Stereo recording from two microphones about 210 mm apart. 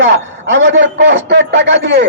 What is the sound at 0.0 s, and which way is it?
A man's voice, 60° right (ahead or behind).